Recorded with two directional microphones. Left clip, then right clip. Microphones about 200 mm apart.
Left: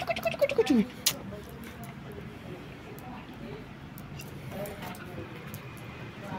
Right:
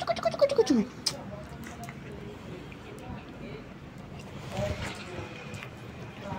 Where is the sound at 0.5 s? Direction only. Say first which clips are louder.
Right 1 dB; 40° left (ahead or behind).